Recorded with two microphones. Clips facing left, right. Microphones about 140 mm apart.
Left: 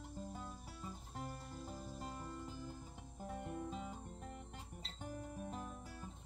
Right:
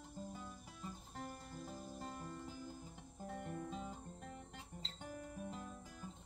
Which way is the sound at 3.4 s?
20° left (ahead or behind).